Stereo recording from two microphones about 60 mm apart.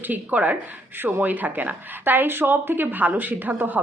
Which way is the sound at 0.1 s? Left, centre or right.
Right.